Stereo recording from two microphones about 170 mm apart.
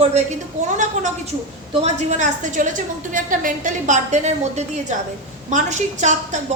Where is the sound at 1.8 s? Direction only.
45° right (ahead or behind).